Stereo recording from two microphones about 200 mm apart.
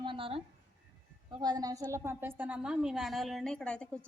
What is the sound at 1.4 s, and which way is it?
A woman's voice, 20° right (ahead or behind).